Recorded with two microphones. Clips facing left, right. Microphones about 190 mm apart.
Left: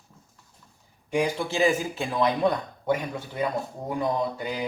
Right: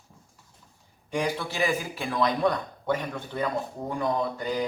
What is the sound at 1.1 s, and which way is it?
A man's voice, 15° left (ahead or behind).